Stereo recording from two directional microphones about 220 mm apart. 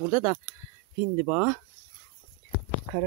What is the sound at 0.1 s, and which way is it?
Speech, 25° right (ahead or behind).